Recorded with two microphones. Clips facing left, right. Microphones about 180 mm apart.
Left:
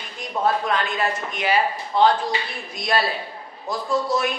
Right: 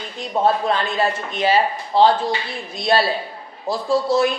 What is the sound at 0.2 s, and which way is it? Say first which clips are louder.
Speech: right 4 dB; 30° right (ahead or behind).